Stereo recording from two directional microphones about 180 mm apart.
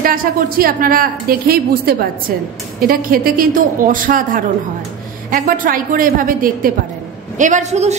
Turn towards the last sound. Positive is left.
turn(degrees=-40)  # may be behind; listen again after turning